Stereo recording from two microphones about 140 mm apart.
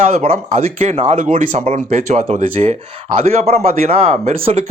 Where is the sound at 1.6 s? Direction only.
50° right (ahead or behind).